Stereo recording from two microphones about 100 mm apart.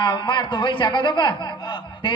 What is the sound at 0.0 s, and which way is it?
A man's voice, 50° left (ahead or behind).